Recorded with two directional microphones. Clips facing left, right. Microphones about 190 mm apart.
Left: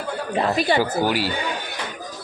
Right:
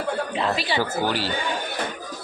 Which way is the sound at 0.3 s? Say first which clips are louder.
Left 9 dB; 50° left (ahead or behind).